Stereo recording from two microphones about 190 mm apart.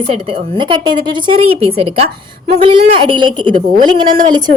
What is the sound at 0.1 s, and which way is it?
A woman's voice, 30° right (ahead or behind).